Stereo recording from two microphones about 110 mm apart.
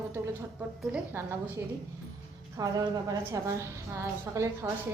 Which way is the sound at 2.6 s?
35° right (ahead or behind).